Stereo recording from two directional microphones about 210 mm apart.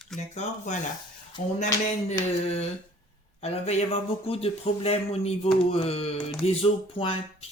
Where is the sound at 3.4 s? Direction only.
30° left (ahead or behind).